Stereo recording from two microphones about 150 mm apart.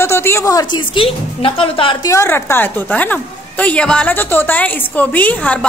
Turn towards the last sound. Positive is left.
turn(degrees=10)  # may be behind; listen again after turning